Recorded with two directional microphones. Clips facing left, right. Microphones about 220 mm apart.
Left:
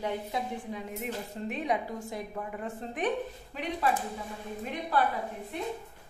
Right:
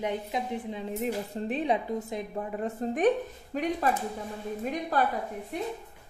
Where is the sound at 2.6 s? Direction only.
45° right (ahead or behind).